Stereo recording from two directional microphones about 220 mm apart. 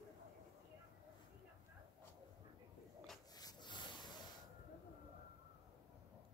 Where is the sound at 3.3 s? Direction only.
20° left (ahead or behind).